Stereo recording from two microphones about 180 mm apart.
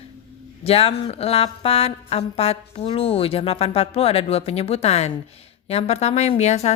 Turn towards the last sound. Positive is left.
turn(degrees=40)  # may be behind; listen again after turning